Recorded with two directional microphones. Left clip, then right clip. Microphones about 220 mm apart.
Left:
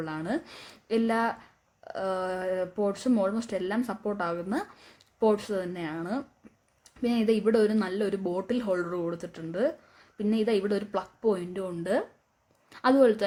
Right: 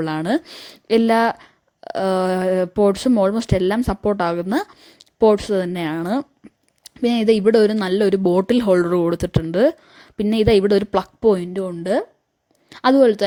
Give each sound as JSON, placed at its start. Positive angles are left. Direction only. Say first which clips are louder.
{"t": 0.0, "sound": "a woman's voice", "louder": "right 11 dB", "side_deg": -40}